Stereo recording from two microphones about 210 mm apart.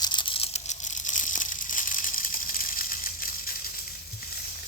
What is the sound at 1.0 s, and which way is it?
Water, 35° left (ahead or behind).